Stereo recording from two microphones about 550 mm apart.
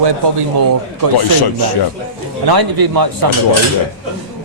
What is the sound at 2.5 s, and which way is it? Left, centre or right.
Speech, right.